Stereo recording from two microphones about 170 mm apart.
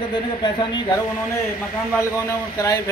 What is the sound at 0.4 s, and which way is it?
A man's voice, 25° left (ahead or behind).